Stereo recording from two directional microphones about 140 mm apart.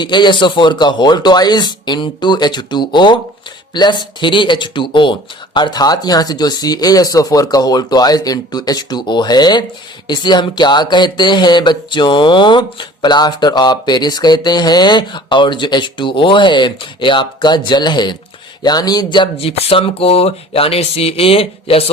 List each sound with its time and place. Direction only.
0.0 s speech: 35° left (ahead or behind)